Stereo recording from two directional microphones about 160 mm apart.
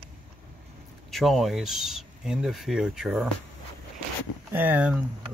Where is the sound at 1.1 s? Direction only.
Centre (ahead or behind).